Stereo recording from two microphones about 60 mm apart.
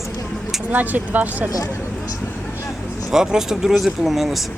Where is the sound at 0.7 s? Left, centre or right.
Right.